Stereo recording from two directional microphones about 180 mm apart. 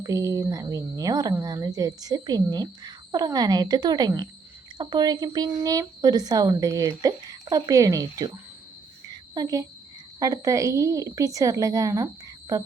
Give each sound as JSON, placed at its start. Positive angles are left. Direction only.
{"t": 0.0, "sound": "speech", "side_deg": -20}
{"t": 9.3, "sound": "speech", "side_deg": -20}